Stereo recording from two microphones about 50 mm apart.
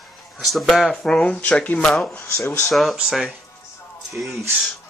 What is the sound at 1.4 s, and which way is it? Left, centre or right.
Speech, left.